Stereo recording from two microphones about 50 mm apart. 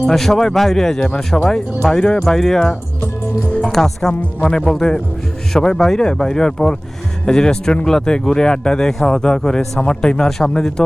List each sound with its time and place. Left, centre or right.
0.1 s speech: centre